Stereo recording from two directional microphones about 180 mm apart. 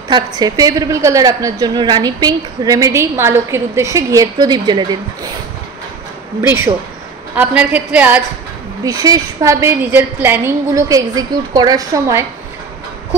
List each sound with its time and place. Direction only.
0.1 s a woman's voice: 20° right (ahead or behind)
6.4 s a woman's voice: 15° right (ahead or behind)
8.8 s a woman's voice: 20° right (ahead or behind)